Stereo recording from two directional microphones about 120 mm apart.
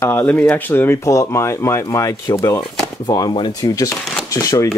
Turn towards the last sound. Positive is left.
turn(degrees=30)  # may be behind; listen again after turning